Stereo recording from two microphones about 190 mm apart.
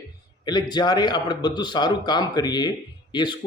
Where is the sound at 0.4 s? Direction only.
20° left (ahead or behind).